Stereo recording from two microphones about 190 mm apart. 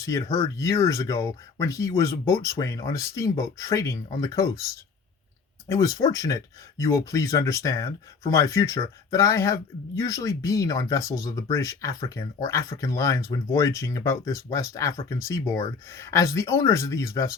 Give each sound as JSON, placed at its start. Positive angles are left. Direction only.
{"t": 0.0, "sound": "speech", "side_deg": 15}